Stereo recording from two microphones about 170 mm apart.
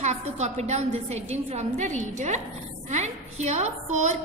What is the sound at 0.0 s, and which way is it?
A woman's voice, 40° right (ahead or behind).